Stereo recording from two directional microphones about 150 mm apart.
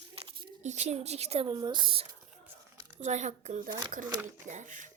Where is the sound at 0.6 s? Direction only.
50° right (ahead or behind).